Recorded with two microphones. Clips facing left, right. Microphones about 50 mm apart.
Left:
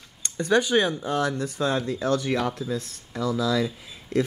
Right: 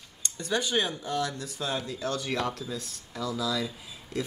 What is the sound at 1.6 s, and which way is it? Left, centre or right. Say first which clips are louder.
Speech: left 6 dB; centre.